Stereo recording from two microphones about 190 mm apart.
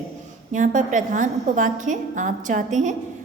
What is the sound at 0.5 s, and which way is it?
A woman's voice, 40° right (ahead or behind).